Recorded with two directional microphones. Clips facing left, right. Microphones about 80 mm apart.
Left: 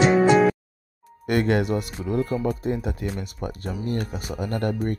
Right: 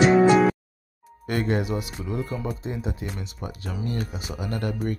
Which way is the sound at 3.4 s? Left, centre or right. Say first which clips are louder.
Left 3 dB; left.